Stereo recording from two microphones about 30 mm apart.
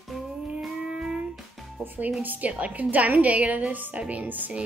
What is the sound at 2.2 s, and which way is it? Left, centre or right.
Speech, right.